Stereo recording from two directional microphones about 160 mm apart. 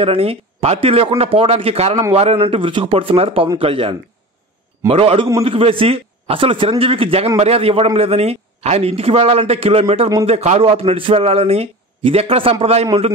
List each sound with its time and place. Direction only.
0.0 s a man's voice: 35° right (ahead or behind)